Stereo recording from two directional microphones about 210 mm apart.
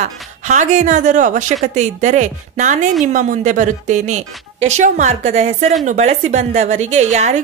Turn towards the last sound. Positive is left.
turn(degrees=-35)  # may be behind; listen again after turning